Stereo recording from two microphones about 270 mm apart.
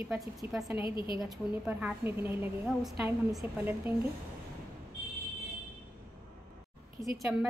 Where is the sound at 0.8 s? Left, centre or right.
Centre.